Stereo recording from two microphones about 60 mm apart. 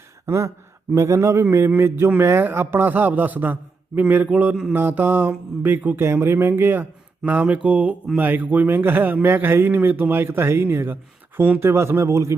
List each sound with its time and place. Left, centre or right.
0.3 s a man's voice: right
6.0 s a man's voice: right
7.4 s a man's voice: right
11.3 s speech: right
11.6 s speech: right